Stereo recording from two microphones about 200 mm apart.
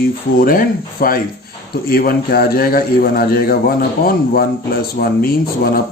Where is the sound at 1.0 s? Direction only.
50° left (ahead or behind).